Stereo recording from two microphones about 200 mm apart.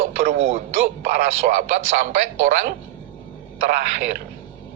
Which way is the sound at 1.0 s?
40° right (ahead or behind).